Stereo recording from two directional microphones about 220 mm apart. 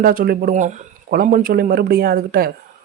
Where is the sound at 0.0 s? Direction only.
40° right (ahead or behind).